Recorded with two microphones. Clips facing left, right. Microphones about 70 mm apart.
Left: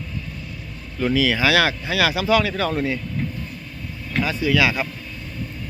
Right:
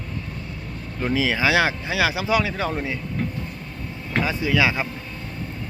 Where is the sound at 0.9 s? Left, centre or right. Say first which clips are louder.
Left 3 dB; right.